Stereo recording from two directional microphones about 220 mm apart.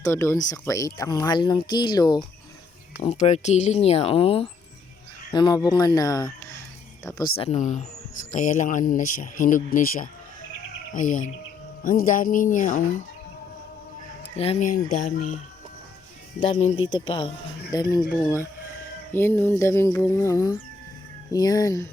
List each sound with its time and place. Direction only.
0.0 s speech: 10° left (ahead or behind)
3.0 s speech: 30° left (ahead or behind)
7.3 s a man's voice: 30° left (ahead or behind)
14.3 s a man's voice: 25° left (ahead or behind)
16.4 s speech: 30° left (ahead or behind)
19.1 s speech: 10° left (ahead or behind)